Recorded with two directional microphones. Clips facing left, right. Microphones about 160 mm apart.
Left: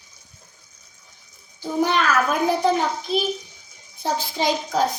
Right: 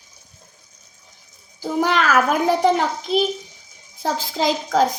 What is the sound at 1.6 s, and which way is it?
Bathtub, 90° right.